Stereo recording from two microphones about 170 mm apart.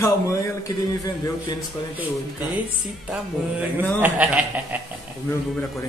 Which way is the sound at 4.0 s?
10° right (ahead or behind).